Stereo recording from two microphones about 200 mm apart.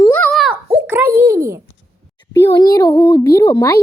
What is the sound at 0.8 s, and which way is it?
Speech, 10° right (ahead or behind).